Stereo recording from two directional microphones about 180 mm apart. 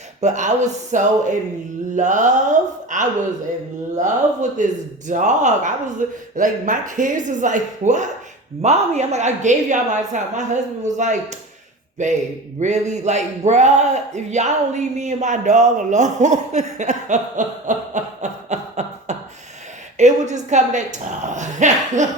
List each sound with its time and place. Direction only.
0.2 s a man's voice: 40° right (ahead or behind)